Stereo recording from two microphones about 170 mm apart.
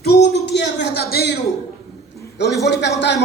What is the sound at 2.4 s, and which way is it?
Speech, 90° left.